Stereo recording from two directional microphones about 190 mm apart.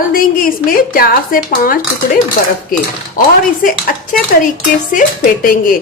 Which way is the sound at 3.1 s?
45° left (ahead or behind).